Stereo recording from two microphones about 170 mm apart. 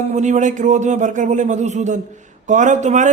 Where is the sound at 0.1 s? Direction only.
45° right (ahead or behind).